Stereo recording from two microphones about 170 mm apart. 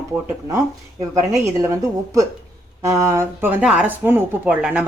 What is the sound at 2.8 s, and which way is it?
Speech, 15° right (ahead or behind).